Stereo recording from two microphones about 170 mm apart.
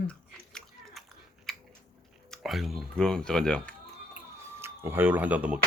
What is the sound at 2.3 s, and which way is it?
Speech, centre (ahead or behind).